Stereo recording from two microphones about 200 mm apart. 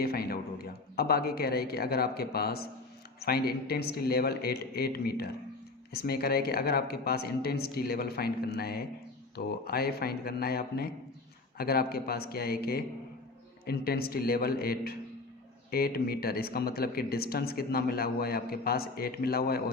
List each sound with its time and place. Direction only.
0.0 s speech: 50° left (ahead or behind)